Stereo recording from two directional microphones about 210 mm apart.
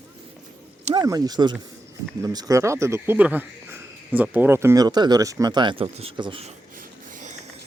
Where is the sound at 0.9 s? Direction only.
15° right (ahead or behind); by 7.4 s 35° right (ahead or behind).